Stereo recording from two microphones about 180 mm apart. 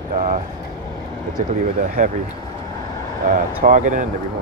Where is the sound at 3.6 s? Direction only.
45° right (ahead or behind).